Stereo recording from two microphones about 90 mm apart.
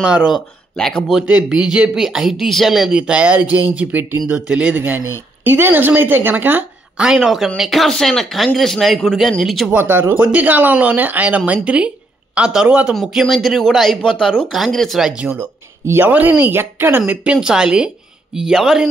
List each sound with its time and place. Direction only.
0.0 s a woman's voice: 10° right (ahead or behind)
0.7 s speech: 5° left (ahead or behind)
1.2 s a woman's voice: 10° right (ahead or behind)
9.7 s a woman's voice: 25° right (ahead or behind)
17.1 s a woman's voice: 15° right (ahead or behind)